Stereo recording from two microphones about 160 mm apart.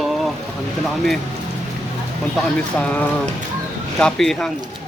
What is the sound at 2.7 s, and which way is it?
Speech, 10° left (ahead or behind).